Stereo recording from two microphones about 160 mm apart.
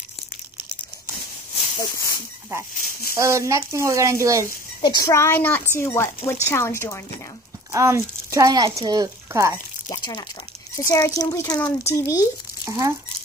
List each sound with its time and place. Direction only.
1.8 s a child's voice: 20° left (ahead or behind)
2.8 s speech: 65° left (ahead or behind)
3.2 s speech: 20° right (ahead or behind)
4.8 s speech: 20° left (ahead or behind)
7.7 s speech: 20° right (ahead or behind)
9.8 s a child's voice: 25° left (ahead or behind)
12.6 s speech: 20° right (ahead or behind)